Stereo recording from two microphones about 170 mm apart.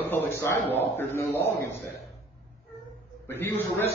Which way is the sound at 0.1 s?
15° left (ahead or behind).